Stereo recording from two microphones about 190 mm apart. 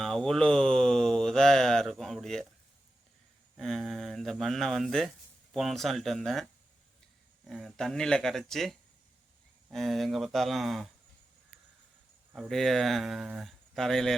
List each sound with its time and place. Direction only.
0.0 s a sound: centre (ahead or behind)
3.6 s speech: centre (ahead or behind)
12.3 s speech: centre (ahead or behind)